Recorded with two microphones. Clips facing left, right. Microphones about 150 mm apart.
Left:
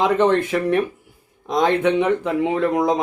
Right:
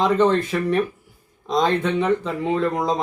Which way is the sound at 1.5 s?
15° left (ahead or behind).